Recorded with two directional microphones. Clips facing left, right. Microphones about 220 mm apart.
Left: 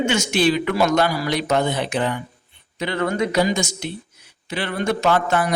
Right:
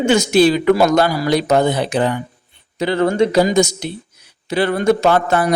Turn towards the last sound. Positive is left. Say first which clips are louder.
# right 4 dB
turn(degrees=-35)  # may be behind; listen again after turning